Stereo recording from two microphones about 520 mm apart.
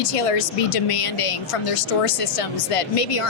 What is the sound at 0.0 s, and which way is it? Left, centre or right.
A woman's voice, left.